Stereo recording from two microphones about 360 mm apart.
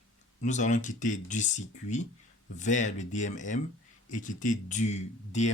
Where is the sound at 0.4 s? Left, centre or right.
Centre.